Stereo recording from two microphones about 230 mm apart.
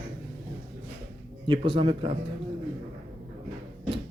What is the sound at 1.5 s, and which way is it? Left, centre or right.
Speech, right.